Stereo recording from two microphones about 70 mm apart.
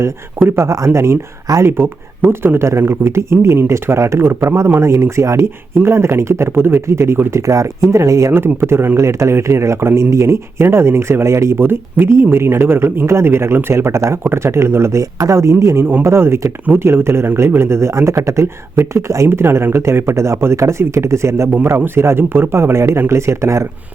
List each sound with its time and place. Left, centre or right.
0.4 s speech: right
8.3 s speech: right